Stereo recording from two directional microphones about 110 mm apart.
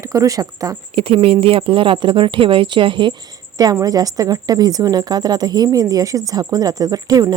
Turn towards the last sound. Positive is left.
turn(degrees=-35)  # may be behind; listen again after turning